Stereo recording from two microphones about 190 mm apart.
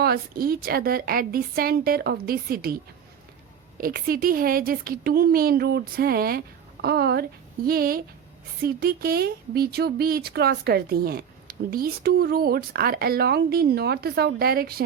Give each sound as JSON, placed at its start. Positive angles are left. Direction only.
{"t": 0.0, "sound": "speech", "side_deg": -50}
{"t": 3.8, "sound": "speech", "side_deg": -50}